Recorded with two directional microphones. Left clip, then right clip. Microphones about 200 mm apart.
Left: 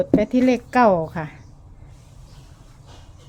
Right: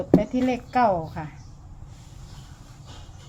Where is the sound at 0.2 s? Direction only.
55° left (ahead or behind).